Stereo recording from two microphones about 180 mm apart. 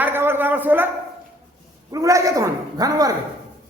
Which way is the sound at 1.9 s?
20° right (ahead or behind).